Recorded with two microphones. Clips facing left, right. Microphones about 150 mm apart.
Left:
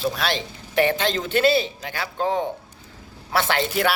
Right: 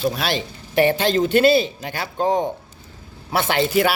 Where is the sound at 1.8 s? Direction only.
40° right (ahead or behind).